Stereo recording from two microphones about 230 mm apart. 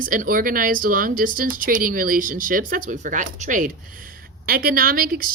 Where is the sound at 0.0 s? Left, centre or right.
Right.